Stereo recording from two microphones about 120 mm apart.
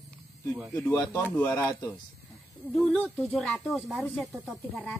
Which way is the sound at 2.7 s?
5° left (ahead or behind).